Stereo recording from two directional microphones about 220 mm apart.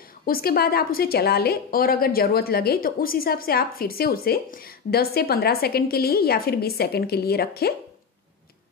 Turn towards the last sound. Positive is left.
turn(degrees=45)  # may be behind; listen again after turning